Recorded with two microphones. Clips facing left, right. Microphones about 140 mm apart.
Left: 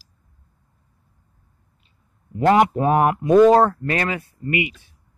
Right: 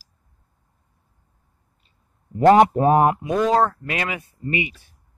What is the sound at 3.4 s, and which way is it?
Speech, centre (ahead or behind).